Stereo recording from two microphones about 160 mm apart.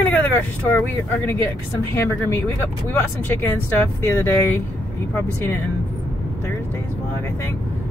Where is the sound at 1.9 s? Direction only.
15° left (ahead or behind).